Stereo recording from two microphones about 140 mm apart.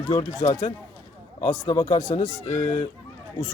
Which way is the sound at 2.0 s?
70° left (ahead or behind).